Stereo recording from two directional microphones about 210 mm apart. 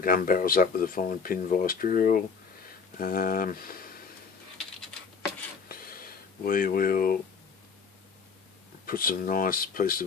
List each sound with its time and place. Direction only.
0.0 s speech: 40° left (ahead or behind)
5.6 s a sound: 45° left (ahead or behind)
8.9 s speech: 45° left (ahead or behind)